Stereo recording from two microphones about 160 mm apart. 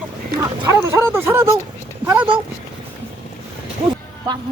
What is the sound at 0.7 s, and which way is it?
Bow-wow, 15° right (ahead or behind).